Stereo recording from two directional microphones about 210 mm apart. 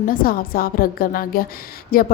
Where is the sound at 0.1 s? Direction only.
45° left (ahead or behind).